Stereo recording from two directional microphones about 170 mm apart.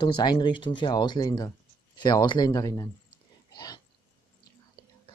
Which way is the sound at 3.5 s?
25° left (ahead or behind).